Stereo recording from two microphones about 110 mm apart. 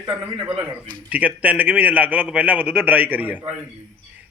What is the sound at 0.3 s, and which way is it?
Speech, 55° right (ahead or behind).